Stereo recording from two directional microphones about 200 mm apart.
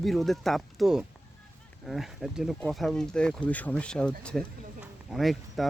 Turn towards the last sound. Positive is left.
turn(degrees=0)  # may be behind; listen again after turning